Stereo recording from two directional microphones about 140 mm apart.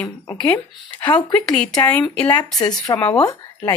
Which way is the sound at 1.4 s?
5° left (ahead or behind).